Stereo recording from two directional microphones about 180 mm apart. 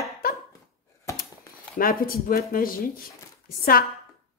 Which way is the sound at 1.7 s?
50° left (ahead or behind).